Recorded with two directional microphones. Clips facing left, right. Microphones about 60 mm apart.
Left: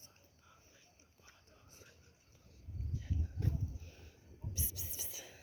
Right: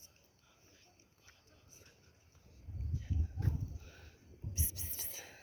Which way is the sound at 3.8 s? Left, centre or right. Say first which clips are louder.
Right 1 dB; right.